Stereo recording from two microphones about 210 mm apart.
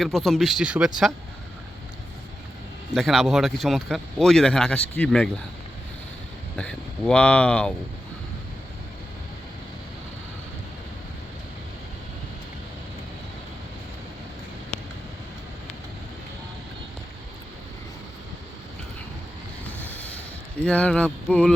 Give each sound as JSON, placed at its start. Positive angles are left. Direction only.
{"t": 0.0, "sound": "speech", "side_deg": 0}
{"t": 2.9, "sound": "speech", "side_deg": 0}
{"t": 6.6, "sound": "speech", "side_deg": 5}
{"t": 19.8, "sound": "a sound", "side_deg": 10}
{"t": 20.7, "sound": "speech", "side_deg": 5}